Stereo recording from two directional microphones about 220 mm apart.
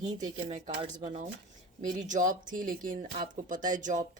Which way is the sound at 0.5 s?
30° right (ahead or behind).